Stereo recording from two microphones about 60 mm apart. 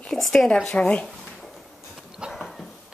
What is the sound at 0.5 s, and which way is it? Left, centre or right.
Speech, centre.